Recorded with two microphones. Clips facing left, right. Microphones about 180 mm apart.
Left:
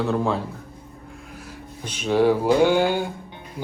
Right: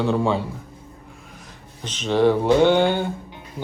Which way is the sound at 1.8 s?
10° left (ahead or behind).